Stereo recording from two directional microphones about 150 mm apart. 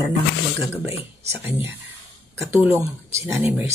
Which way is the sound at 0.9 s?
15° right (ahead or behind).